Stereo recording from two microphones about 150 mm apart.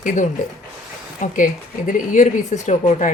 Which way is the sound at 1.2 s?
55° left (ahead or behind).